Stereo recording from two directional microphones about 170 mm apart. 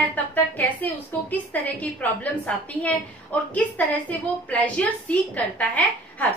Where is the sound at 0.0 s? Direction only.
10° left (ahead or behind).